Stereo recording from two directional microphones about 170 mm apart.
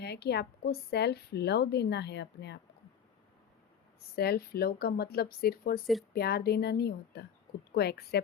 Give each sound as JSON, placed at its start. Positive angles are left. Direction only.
{"t": 0.0, "sound": "a woman's voice", "side_deg": 75}
{"t": 4.1, "sound": "speech", "side_deg": 65}
{"t": 5.8, "sound": "speech", "side_deg": 0}
{"t": 6.1, "sound": "a woman's voice", "side_deg": 70}